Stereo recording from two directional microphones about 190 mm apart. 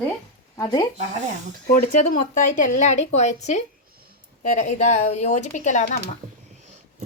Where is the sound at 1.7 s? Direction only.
45° left (ahead or behind).